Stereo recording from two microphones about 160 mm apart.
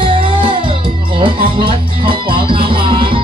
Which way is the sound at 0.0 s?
35° right (ahead or behind).